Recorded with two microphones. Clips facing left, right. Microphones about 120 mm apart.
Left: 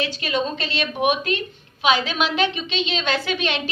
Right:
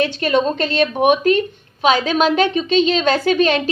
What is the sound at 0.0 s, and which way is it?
A woman's voice, 50° right (ahead or behind).